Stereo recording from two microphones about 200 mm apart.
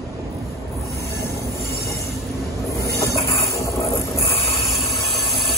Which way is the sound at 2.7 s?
15° left (ahead or behind).